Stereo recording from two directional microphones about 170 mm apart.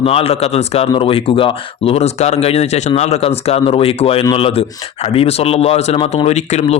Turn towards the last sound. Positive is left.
turn(degrees=40)  # may be behind; listen again after turning